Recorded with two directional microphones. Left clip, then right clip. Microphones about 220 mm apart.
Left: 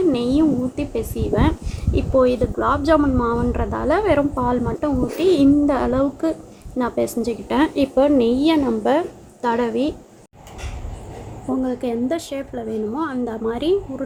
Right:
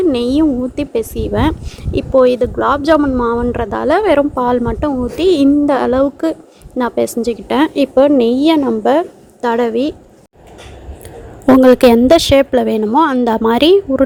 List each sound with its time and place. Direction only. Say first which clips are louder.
0.0 s a woman's voice: right 5 dB; 35° right (ahead or behind)
11.6 s a woman's voice: right 17 dB; 45° right (ahead or behind)